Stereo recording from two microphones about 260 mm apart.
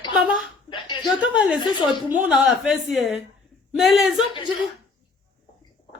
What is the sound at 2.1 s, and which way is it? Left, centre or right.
A woman's voice, centre.